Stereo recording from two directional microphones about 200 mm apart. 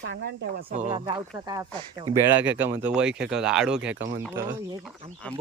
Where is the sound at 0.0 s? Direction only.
55° right (ahead or behind).